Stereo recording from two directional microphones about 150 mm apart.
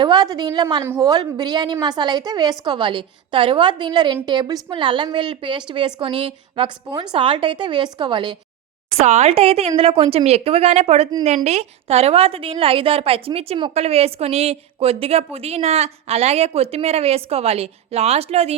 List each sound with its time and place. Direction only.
0.0 s a woman's voice: 30° right (ahead or behind)
9.0 s a woman's voice: 45° right (ahead or behind)